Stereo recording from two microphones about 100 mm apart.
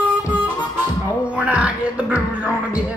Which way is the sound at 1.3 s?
10° right (ahead or behind).